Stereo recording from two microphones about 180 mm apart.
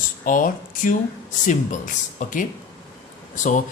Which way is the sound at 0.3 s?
45° left (ahead or behind).